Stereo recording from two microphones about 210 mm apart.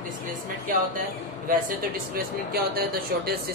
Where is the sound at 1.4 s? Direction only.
40° right (ahead or behind).